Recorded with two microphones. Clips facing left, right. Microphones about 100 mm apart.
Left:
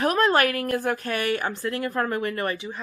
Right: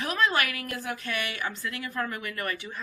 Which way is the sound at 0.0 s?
45° left (ahead or behind).